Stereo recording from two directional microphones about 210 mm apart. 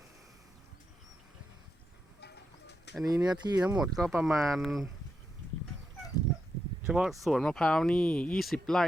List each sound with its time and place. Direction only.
2.2 s bird: 55° left (ahead or behind)
3.0 s speech: 15° right (ahead or behind)
3.8 s speech: centre (ahead or behind)
6.8 s speech: 5° right (ahead or behind)